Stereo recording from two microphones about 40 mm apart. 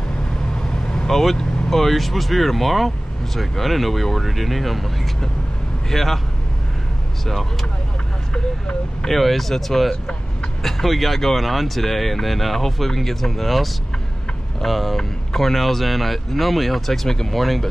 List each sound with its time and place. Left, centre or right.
0.6 s speech: centre
8.3 s speech: centre
9.1 s speech: centre